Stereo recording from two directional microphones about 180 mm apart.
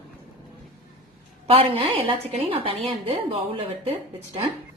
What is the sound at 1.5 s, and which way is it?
A woman's voice, 30° right (ahead or behind).